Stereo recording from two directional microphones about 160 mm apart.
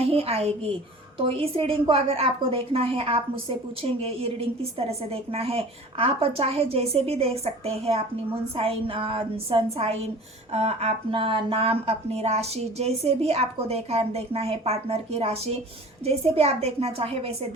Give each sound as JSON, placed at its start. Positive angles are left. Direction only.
{"t": 0.0, "sound": "a woman's voice", "side_deg": -40}